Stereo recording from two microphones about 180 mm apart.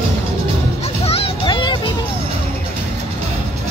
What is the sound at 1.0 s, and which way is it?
Music, 35° left (ahead or behind).